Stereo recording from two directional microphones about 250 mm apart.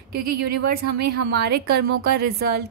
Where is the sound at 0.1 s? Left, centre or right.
Right.